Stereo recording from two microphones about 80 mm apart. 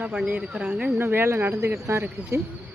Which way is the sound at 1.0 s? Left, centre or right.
Right.